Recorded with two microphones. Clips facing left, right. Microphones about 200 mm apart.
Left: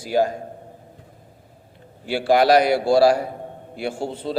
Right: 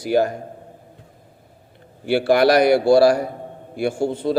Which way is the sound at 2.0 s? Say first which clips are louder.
Right 2 dB; 60° right (ahead or behind).